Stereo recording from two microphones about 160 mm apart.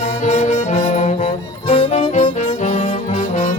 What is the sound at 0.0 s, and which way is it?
Music, 45° left (ahead or behind).